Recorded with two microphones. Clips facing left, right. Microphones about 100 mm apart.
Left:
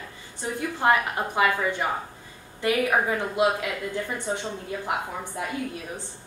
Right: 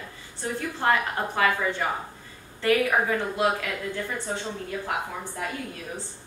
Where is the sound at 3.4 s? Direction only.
20° left (ahead or behind).